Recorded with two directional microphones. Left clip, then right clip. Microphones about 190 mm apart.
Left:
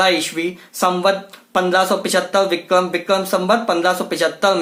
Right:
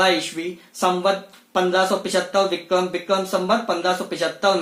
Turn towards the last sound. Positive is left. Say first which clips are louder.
# left 4 dB
turn(degrees=20)  # may be behind; listen again after turning